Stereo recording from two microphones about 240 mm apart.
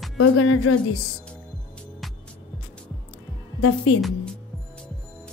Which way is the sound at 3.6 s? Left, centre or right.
Left.